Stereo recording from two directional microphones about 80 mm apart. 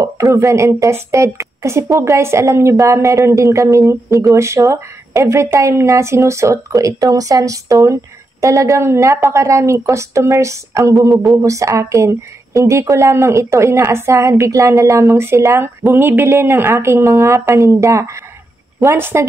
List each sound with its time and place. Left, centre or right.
0.0 s a woman's voice: right